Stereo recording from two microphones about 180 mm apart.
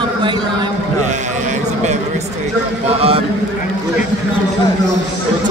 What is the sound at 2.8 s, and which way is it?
Speech, 30° right (ahead or behind).